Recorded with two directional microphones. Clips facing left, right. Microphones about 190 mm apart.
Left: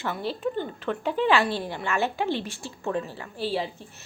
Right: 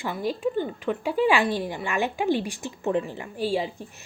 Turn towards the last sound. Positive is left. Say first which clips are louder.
# right 3 dB
turn(degrees=-15)  # may be behind; listen again after turning